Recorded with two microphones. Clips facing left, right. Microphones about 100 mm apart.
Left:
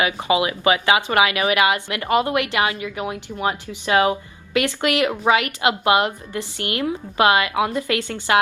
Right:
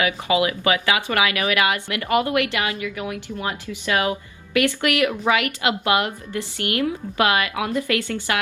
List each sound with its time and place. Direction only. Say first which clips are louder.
0.0 s speech: left 1 dB; 20° left (ahead or behind)